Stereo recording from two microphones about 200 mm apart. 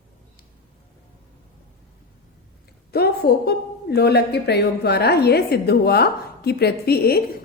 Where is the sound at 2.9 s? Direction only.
50° left (ahead or behind).